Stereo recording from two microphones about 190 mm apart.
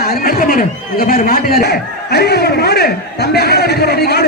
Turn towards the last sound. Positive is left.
turn(degrees=55)  # may be behind; listen again after turning